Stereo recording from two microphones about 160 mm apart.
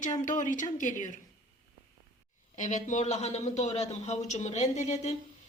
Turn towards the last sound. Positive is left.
turn(degrees=45)  # may be behind; listen again after turning